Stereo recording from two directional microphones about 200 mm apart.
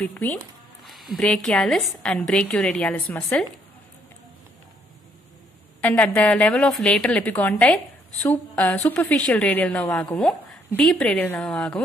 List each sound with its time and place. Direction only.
0.0 s a woman's voice: 5° left (ahead or behind)
5.8 s a woman's voice: 5° left (ahead or behind)